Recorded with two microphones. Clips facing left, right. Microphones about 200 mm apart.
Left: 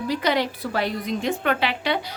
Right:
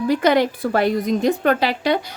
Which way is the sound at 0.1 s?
50° right (ahead or behind).